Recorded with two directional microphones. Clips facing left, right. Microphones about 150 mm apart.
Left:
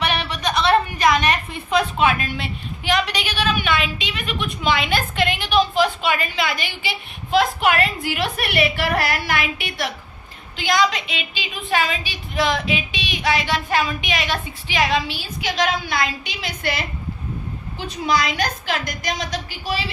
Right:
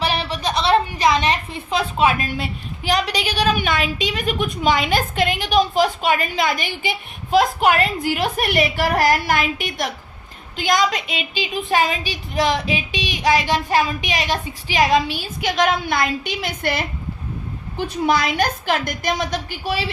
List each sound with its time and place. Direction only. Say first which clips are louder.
0.0 s a woman's voice: right 1 dB; 30° right (ahead or behind); by 19.8 s 55° right (ahead or behind)